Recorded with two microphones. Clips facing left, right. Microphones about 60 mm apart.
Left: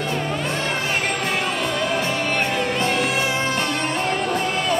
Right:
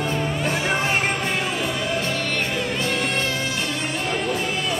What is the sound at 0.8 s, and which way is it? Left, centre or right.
Music, right.